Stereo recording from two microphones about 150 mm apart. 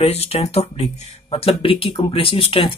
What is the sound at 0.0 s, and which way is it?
Speech, 40° left (ahead or behind).